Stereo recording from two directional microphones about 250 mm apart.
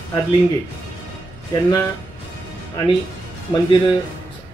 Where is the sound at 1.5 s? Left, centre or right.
Centre.